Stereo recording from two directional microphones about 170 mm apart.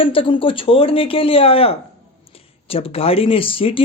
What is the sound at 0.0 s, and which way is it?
Speech, 30° left (ahead or behind).